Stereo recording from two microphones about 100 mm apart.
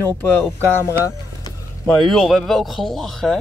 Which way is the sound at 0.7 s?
30° left (ahead or behind).